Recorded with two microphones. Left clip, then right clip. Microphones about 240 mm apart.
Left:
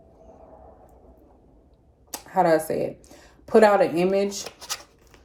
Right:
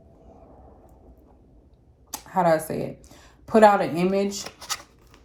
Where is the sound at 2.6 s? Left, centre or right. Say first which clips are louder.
Left 4 dB; centre.